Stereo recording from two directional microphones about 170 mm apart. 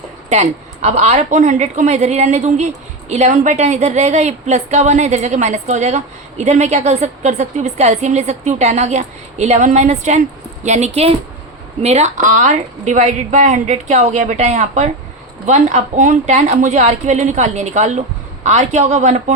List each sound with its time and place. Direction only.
0.3 s a woman's voice: 40° right (ahead or behind)